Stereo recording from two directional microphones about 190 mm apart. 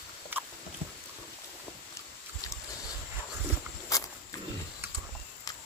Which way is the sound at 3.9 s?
15° left (ahead or behind).